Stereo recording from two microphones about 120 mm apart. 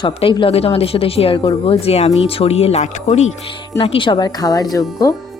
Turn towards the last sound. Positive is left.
turn(degrees=30)  # may be behind; listen again after turning